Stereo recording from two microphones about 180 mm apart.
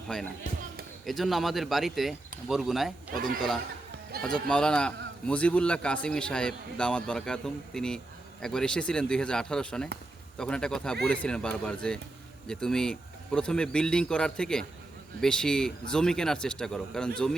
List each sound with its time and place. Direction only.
0.1 s a man's voice: 5° left (ahead or behind)
4.2 s a man's voice: 5° left (ahead or behind)